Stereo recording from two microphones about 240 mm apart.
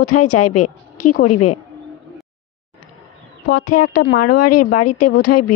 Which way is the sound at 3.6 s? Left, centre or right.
Left.